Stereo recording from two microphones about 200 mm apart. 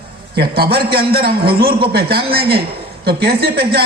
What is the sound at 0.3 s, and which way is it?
A woman's voice, 50° right (ahead or behind).